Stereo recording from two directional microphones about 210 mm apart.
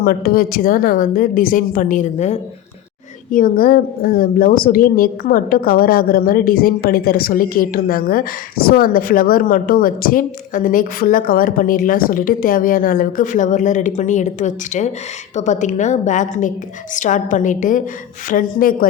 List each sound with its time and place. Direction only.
0.0 s a woman's voice: 45° left (ahead or behind)